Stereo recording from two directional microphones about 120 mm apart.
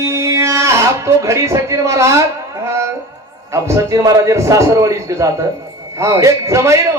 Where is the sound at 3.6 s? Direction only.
25° right (ahead or behind).